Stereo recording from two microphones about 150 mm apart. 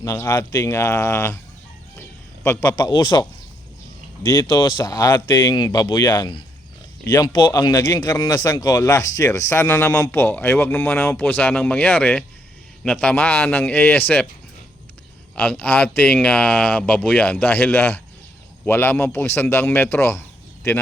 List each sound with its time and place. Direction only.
0.0 s speech: 20° left (ahead or behind)
15.4 s speech: 10° left (ahead or behind)